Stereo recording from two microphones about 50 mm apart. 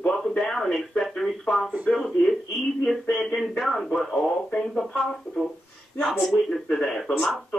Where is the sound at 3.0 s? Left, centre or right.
Centre.